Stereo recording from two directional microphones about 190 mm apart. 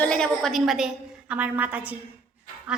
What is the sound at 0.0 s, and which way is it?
A woman's voice, 5° left (ahead or behind).